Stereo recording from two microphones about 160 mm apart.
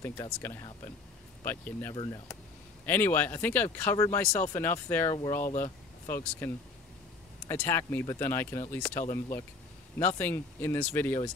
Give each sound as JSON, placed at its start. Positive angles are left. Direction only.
{"t": 0.0, "sound": "speech", "side_deg": 15}
{"t": 2.0, "sound": "speech", "side_deg": 25}
{"t": 2.8, "sound": "speech", "side_deg": 10}
{"t": 5.4, "sound": "speech", "side_deg": 55}
{"t": 6.0, "sound": "speech", "side_deg": 15}
{"t": 9.0, "sound": "speech", "side_deg": 20}